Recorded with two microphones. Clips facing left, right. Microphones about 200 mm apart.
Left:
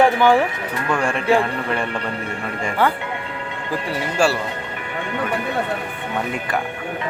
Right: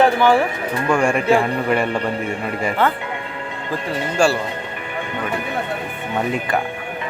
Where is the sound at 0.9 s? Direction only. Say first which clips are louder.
Right 3 dB; 10° right (ahead or behind).